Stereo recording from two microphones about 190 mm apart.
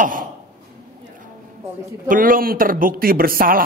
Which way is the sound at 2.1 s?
45° right (ahead or behind).